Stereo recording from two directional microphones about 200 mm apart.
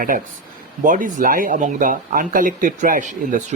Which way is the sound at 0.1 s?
45° right (ahead or behind).